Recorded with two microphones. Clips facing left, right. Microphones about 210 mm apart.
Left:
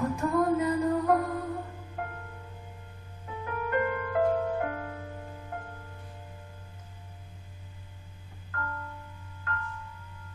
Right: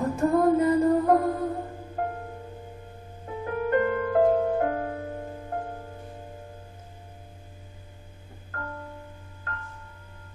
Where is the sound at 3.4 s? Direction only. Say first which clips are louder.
Right 5 dB; 35° right (ahead or behind).